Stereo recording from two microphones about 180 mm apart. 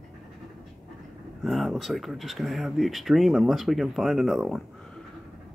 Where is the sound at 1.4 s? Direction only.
Centre (ahead or behind).